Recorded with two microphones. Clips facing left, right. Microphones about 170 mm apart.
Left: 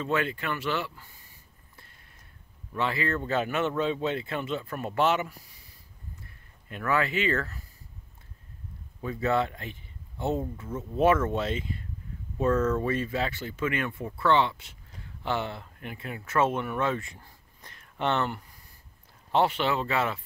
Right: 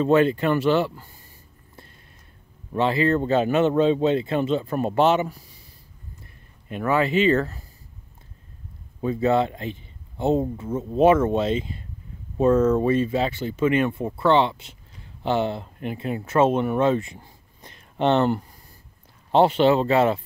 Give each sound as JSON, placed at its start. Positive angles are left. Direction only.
{"t": 0.0, "sound": "speech", "side_deg": -30}
{"t": 2.7, "sound": "speech", "side_deg": -30}
{"t": 6.7, "sound": "speech", "side_deg": -25}
{"t": 9.0, "sound": "speech", "side_deg": -25}